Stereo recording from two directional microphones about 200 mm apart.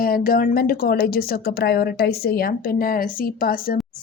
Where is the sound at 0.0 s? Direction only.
45° left (ahead or behind).